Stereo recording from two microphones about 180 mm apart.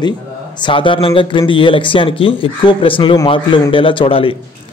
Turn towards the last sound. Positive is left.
turn(degrees=30)  # may be behind; listen again after turning